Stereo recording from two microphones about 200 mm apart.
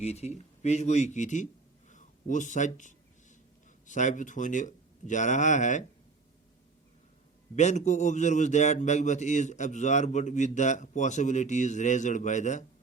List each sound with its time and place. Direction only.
0.0 s a man's voice: 35° left (ahead or behind)
1.9 s a sound: 40° left (ahead or behind)
3.8 s a man's voice: 40° left (ahead or behind)
7.5 s a man's voice: 35° left (ahead or behind)